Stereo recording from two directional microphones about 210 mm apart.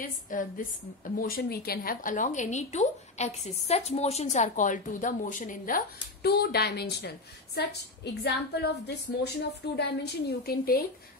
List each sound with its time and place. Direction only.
0.0 s a woman's voice: 40° left (ahead or behind)